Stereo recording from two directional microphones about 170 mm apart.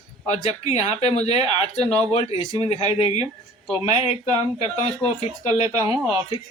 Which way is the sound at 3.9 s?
35° left (ahead or behind).